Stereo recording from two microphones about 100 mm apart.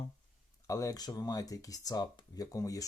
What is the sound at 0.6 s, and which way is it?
Speech, 35° left (ahead or behind).